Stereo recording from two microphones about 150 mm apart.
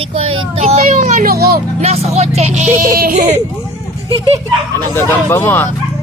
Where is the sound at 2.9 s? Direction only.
75° right (ahead or behind); by 3.3 s 60° right (ahead or behind).